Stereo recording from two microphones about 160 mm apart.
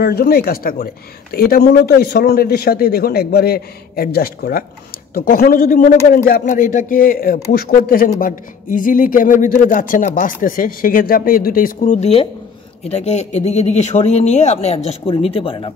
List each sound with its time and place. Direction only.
0.0 s a man's voice: 75° left (ahead or behind); by 15.7 s 35° left (ahead or behind)